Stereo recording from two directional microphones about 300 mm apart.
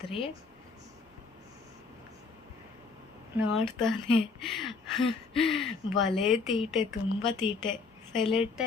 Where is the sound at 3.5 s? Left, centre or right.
Centre.